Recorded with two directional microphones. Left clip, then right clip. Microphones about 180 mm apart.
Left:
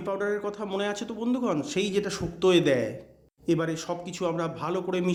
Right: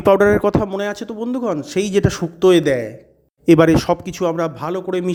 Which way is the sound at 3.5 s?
50° right (ahead or behind).